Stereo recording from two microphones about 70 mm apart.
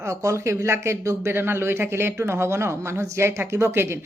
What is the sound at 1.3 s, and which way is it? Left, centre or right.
Speech, right.